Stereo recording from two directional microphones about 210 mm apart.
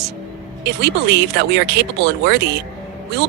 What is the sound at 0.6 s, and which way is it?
Speech, 55° right (ahead or behind).